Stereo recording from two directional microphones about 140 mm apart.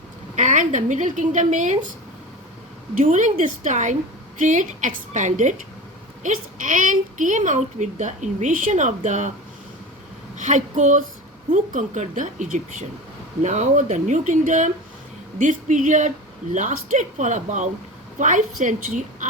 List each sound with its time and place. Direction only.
0.3 s a woman's voice: 60° right (ahead or behind)
3.0 s a woman's voice: 60° right (ahead or behind)
10.3 s a woman's voice: 60° right (ahead or behind)